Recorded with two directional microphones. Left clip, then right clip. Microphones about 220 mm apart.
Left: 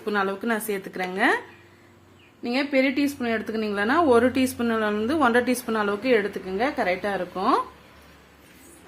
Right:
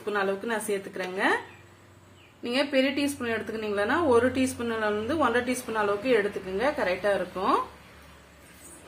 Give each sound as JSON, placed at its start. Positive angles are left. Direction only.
{"t": 0.0, "sound": "a woman's voice", "side_deg": 50}
{"t": 2.4, "sound": "a woman's voice", "side_deg": 35}